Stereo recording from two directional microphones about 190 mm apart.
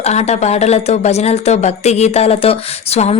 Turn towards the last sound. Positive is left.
turn(degrees=35)  # may be behind; listen again after turning